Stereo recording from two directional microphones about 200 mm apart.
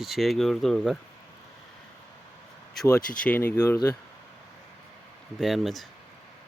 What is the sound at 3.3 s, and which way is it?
Speech, 10° left (ahead or behind).